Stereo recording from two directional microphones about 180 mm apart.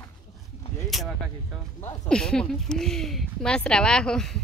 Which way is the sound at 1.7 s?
10° left (ahead or behind).